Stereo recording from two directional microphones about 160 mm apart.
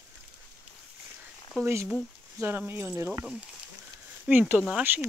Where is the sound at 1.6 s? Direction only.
15° right (ahead or behind).